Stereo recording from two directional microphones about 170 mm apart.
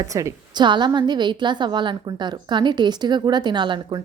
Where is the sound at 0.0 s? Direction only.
20° right (ahead or behind).